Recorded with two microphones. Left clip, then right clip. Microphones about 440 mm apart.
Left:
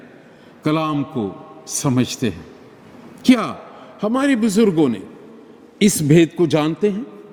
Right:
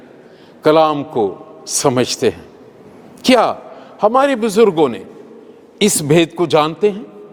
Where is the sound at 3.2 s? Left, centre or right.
Right.